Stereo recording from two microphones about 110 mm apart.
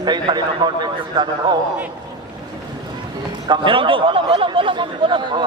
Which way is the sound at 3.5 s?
50° right (ahead or behind).